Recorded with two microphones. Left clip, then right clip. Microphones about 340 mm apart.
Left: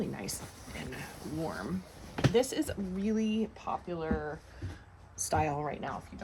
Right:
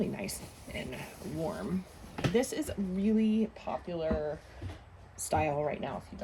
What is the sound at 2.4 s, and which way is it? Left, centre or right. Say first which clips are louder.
Speech: left 1 dB; centre.